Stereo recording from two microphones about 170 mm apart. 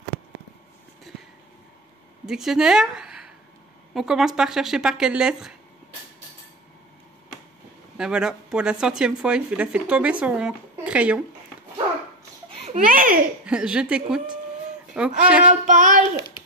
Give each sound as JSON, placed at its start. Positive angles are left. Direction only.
{"t": 2.2, "sound": "speech", "side_deg": -5}
{"t": 8.0, "sound": "speech", "side_deg": -5}
{"t": 12.4, "sound": "baby laughter", "side_deg": -45}
{"t": 13.5, "sound": "speech", "side_deg": -5}
{"t": 15.6, "sound": "child singing", "side_deg": -50}